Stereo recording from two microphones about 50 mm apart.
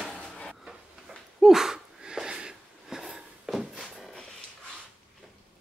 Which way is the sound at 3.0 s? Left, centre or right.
Centre.